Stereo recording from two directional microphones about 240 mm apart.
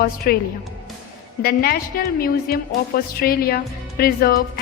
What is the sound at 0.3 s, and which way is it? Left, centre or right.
A woman's voice, left.